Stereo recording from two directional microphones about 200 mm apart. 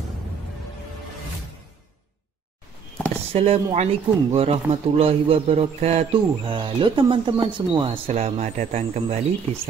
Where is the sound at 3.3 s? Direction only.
30° right (ahead or behind).